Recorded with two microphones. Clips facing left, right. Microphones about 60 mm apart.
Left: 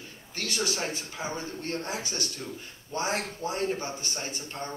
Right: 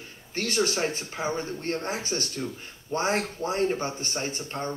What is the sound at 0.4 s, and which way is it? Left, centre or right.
A man's voice, right.